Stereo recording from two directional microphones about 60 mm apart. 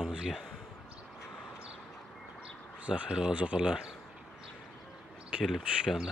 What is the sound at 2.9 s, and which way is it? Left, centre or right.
Speech, centre.